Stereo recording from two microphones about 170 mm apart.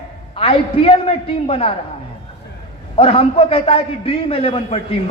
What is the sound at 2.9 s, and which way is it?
A man's voice, 35° left (ahead or behind).